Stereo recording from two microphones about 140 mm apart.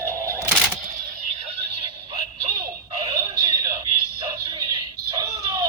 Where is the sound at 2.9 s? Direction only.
40° right (ahead or behind).